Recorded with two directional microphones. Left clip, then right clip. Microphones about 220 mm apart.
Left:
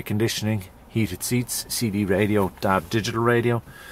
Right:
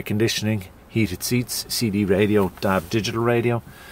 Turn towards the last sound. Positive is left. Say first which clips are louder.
# even
turn(degrees=0)  # may be behind; listen again after turning